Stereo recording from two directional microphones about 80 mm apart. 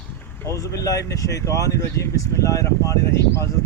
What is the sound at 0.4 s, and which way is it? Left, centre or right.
Speech, left.